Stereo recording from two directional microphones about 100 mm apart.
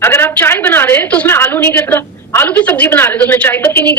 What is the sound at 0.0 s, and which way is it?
A woman's voice, 25° left (ahead or behind).